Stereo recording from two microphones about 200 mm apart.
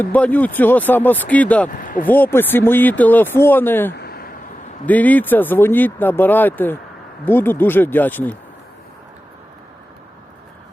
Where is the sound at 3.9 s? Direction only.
50° left (ahead or behind).